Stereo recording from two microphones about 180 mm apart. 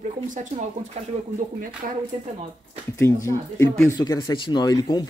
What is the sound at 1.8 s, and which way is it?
Speech, 45° right (ahead or behind).